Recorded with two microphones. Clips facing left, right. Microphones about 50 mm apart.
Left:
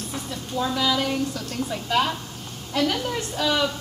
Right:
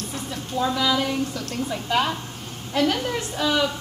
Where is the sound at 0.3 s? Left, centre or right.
Centre.